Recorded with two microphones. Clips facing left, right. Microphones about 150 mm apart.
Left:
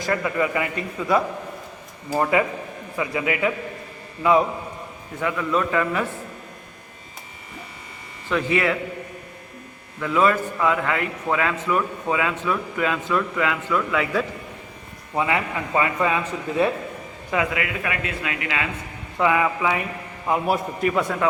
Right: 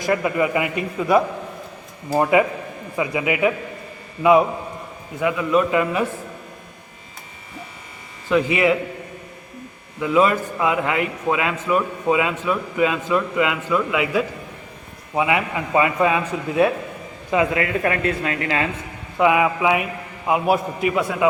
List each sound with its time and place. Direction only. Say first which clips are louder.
0.0 s a man's voice: right 3 dB; 20° right (ahead or behind)
8.3 s a man's voice: right 4 dB; 15° right (ahead or behind)
10.0 s a man's voice: right 2 dB; 15° right (ahead or behind)
17.3 s speech: right 5 dB; 30° right (ahead or behind)
19.1 s a man's voice: right 3 dB; 15° right (ahead or behind)